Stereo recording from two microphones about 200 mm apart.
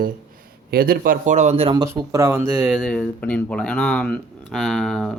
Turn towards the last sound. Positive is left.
turn(degrees=0)  # may be behind; listen again after turning